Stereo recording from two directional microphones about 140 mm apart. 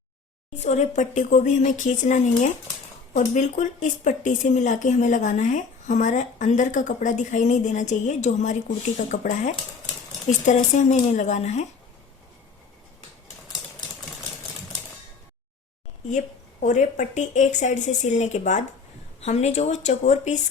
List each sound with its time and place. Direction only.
0.6 s speech: 55° left (ahead or behind)
16.0 s speech: 60° left (ahead or behind)